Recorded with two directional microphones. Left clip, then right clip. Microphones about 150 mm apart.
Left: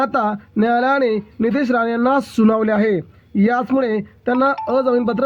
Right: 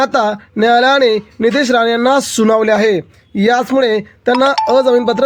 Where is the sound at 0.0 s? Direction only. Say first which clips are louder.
Right 5 dB; 40° right (ahead or behind).